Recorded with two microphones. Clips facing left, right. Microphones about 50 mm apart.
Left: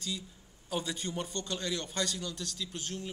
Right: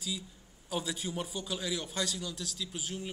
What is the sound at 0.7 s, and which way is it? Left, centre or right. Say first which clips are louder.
A man's voice: even; centre.